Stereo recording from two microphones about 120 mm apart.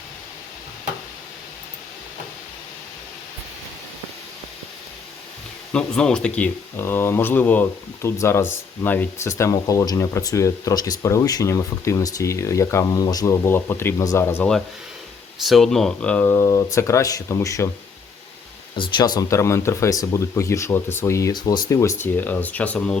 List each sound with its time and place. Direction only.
5.7 s speech: 5° left (ahead or behind)
15.4 s speech: centre (ahead or behind); by 17.7 s 25° left (ahead or behind)
18.8 s speech: 35° left (ahead or behind)
19.4 s speech: 25° left (ahead or behind)
22.0 s speech: 15° left (ahead or behind)